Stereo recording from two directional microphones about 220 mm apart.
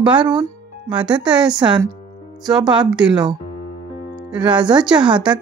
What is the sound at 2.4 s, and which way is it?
Speech, 5° right (ahead or behind).